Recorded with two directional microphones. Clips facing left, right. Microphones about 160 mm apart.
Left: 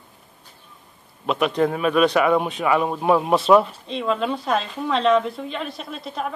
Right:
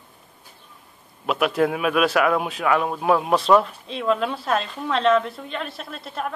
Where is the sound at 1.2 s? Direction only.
5° right (ahead or behind).